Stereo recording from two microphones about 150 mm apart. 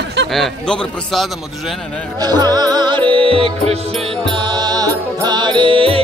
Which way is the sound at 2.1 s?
25° right (ahead or behind).